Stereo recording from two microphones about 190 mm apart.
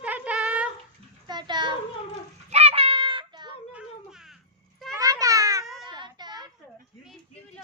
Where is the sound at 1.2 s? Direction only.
25° right (ahead or behind).